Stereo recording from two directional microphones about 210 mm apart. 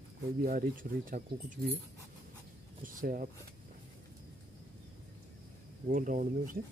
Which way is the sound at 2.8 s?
40° right (ahead or behind).